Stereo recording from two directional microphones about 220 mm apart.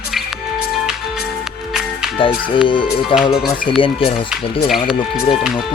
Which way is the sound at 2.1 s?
25° left (ahead or behind).